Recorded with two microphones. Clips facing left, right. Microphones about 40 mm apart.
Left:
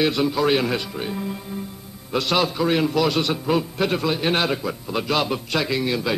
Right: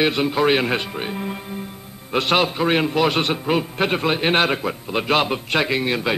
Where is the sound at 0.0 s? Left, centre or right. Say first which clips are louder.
Right 2 dB; right.